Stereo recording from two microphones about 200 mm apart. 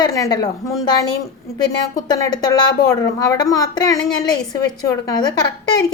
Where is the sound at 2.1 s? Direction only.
20° left (ahead or behind).